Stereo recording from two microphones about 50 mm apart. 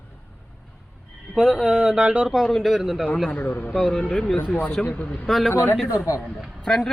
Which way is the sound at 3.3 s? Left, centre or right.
Left.